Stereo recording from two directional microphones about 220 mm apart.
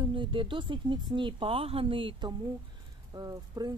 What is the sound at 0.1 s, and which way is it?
Speech, 20° right (ahead or behind).